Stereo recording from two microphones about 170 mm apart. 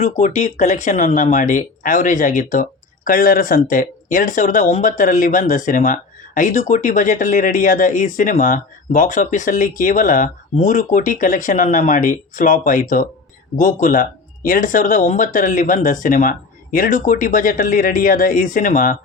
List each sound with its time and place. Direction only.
0.0 s speech: 45° left (ahead or behind)